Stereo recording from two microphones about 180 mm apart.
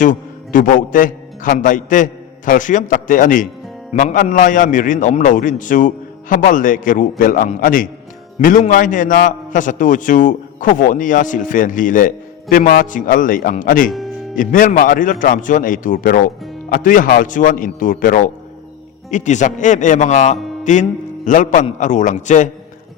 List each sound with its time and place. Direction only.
0.0 s a man's voice: 45° left (ahead or behind)